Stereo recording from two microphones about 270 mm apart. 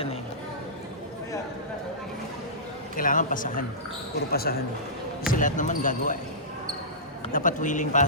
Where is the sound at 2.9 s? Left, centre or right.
Left.